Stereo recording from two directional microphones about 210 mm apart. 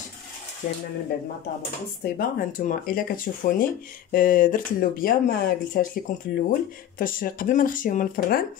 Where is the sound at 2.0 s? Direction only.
45° left (ahead or behind).